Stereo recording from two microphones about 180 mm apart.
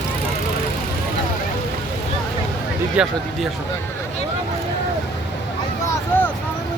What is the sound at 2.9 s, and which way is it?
Speech, centre (ahead or behind).